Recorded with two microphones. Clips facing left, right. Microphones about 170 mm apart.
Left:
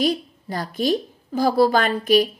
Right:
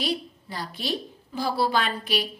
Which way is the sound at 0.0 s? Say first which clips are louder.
Left 7 dB; 45° left (ahead or behind).